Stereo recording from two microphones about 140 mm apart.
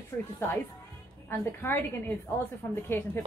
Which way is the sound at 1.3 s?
15° left (ahead or behind).